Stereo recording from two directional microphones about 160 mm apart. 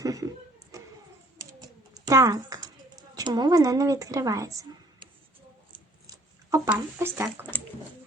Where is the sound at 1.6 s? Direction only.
20° right (ahead or behind).